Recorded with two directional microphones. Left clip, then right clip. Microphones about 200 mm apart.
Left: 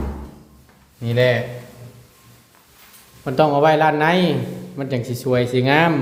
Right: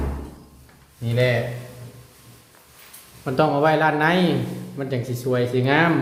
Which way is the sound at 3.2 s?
10° left (ahead or behind).